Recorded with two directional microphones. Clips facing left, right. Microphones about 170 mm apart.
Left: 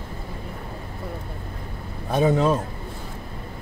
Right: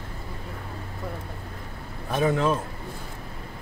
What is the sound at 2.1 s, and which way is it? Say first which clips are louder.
Speech: left 4 dB; 30° left (ahead or behind).